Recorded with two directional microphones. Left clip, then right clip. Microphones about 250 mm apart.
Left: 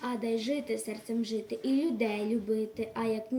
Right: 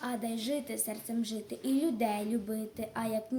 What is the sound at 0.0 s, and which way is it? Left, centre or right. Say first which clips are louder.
A woman's voice: left 4 dB; centre.